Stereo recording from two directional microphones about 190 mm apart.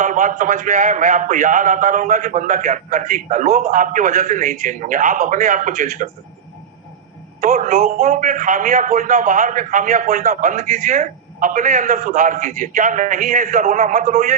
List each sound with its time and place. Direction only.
0.0 s a man's voice: 40° right (ahead or behind)
7.4 s a man's voice: 35° right (ahead or behind)